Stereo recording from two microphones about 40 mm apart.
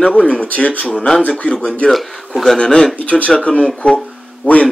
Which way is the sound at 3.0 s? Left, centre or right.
Left.